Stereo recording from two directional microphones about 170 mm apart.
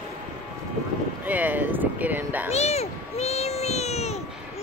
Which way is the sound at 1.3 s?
10° right (ahead or behind).